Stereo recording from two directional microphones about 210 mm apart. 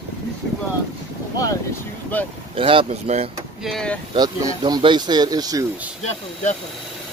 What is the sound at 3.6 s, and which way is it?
Speech, centre (ahead or behind).